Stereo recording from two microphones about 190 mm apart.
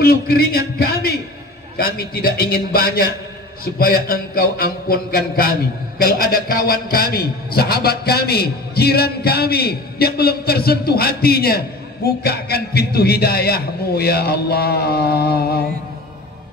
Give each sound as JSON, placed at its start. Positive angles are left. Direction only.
{"t": 0.0, "sound": "a man's voice", "side_deg": 55}